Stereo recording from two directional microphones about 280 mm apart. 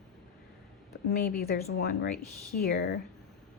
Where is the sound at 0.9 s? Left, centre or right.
Left.